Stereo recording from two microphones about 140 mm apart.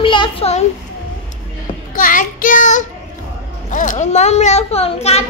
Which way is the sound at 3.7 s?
60° left (ahead or behind).